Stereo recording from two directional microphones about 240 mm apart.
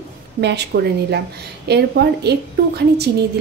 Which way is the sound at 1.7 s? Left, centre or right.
Right.